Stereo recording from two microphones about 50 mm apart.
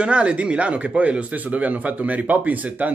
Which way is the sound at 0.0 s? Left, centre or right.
Right.